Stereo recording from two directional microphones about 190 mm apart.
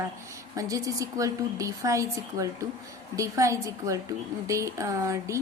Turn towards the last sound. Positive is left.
turn(degrees=-15)  # may be behind; listen again after turning